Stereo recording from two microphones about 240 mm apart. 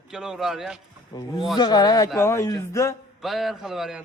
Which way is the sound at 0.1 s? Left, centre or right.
Centre.